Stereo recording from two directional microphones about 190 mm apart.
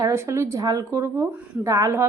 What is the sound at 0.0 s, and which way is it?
Speech, 15° right (ahead or behind).